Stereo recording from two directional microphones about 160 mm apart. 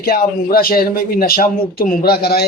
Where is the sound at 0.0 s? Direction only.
70° left (ahead or behind).